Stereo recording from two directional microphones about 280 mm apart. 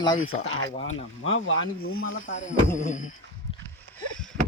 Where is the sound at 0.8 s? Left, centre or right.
Left.